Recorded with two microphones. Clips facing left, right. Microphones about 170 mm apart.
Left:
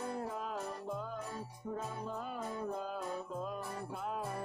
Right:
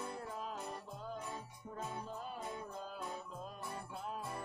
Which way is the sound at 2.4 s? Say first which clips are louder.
Left 6 dB; 50° left (ahead or behind).